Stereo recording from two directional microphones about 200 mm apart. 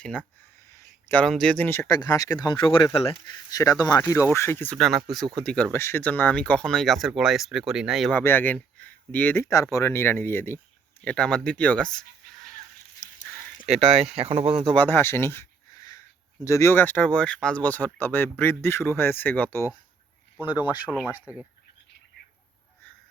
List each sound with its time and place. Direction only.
0.0 s speech: 5° left (ahead or behind)
8.2 s speech: 10° left (ahead or behind)
13.0 s a sound: 40° left (ahead or behind)
13.7 s speech: 30° right (ahead or behind)
14.7 s speech: 10° left (ahead or behind)
21.1 s speech: 5° right (ahead or behind)